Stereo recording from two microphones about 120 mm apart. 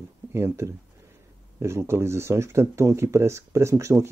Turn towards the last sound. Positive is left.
turn(degrees=-25)  # may be behind; listen again after turning